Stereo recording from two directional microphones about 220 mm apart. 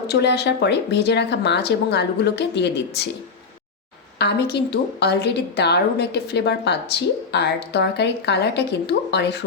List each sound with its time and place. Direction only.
0.1 s a woman's voice: 50° left (ahead or behind)
4.2 s a woman's voice: 50° left (ahead or behind)